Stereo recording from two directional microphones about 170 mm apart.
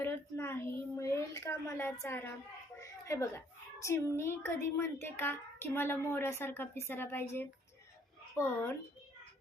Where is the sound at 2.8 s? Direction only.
15° left (ahead or behind).